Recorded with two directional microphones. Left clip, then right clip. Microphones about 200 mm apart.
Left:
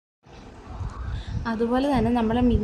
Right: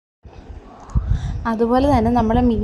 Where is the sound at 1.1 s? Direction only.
25° right (ahead or behind).